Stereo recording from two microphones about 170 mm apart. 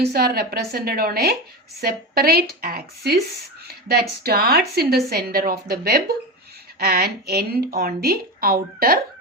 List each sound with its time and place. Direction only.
0.0 s speech: 65° right (ahead or behind)